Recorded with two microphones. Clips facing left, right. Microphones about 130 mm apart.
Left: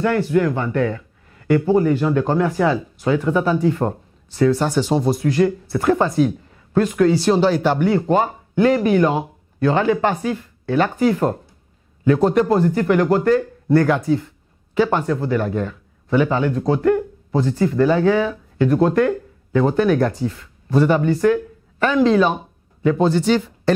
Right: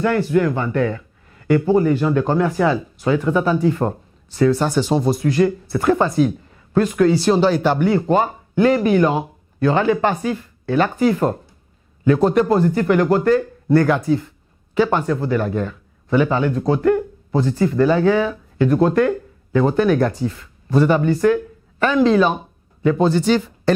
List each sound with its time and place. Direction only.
0.0 s speech: 10° right (ahead or behind)